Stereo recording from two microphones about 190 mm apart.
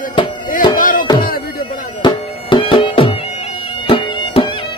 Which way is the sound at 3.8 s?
30° left (ahead or behind).